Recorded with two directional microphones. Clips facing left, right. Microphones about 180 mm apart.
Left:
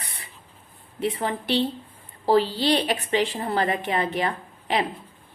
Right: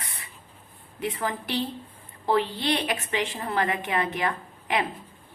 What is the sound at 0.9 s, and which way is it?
A woman's voice, 30° left (ahead or behind).